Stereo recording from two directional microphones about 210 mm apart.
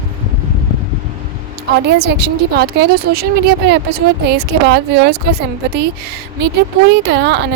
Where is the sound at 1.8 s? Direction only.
50° right (ahead or behind).